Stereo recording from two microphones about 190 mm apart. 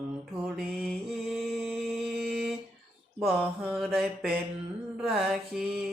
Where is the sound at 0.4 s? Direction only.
Centre (ahead or behind).